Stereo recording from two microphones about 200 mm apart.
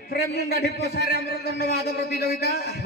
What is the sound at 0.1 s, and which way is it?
A man's voice, 50° left (ahead or behind).